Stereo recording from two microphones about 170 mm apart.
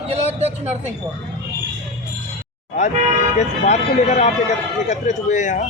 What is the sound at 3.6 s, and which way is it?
Speech, 45° left (ahead or behind).